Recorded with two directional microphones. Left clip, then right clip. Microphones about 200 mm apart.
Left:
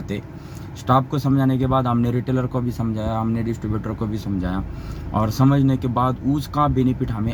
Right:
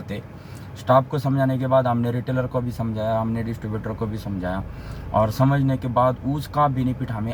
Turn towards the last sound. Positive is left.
turn(degrees=0)  # may be behind; listen again after turning